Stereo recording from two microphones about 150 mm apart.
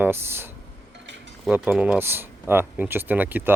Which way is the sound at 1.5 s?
10° right (ahead or behind).